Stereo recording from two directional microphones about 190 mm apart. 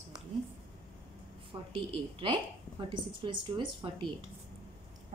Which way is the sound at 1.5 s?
25° right (ahead or behind).